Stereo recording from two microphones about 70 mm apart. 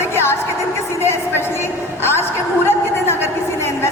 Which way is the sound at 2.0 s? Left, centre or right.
Left.